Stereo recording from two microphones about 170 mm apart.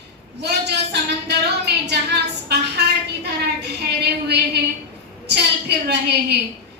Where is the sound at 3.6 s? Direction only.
75° right (ahead or behind).